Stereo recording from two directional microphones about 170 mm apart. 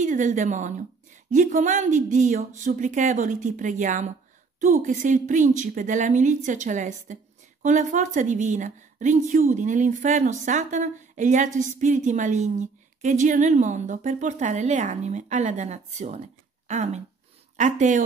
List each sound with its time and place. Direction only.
0.0 s a woman's voice: 45° right (ahead or behind)